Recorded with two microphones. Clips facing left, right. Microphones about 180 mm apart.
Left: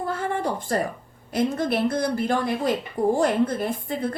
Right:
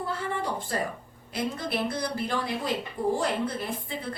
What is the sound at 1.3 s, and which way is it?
A woman's voice, 45° left (ahead or behind).